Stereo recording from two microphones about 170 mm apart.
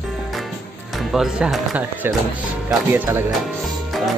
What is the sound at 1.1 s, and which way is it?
Speech, centre (ahead or behind).